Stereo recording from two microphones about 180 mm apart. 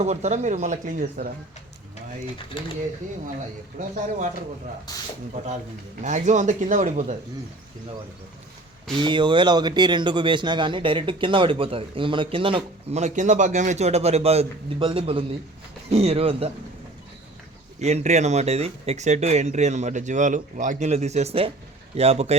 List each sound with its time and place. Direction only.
0.0 s speech: 40° right (ahead or behind)
2.5 s speech: 30° left (ahead or behind)
3.8 s speech: 45° right (ahead or behind)
6.0 s speech: 40° right (ahead or behind)
9.0 s speech: 25° right (ahead or behind)
17.7 s speech: 40° right (ahead or behind)